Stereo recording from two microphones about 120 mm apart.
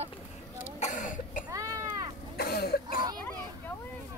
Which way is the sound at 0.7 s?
85° left.